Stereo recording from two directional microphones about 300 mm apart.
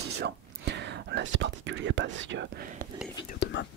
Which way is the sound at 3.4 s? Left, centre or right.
Left.